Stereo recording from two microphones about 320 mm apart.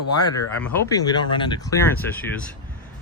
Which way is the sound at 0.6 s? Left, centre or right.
Centre.